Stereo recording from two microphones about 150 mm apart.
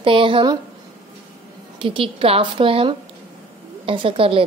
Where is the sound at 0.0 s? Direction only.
35° right (ahead or behind).